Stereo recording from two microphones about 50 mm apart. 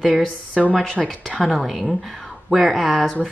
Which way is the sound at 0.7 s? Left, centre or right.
Centre.